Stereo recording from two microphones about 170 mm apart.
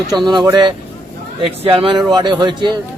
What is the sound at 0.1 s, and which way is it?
Speech, 25° right (ahead or behind).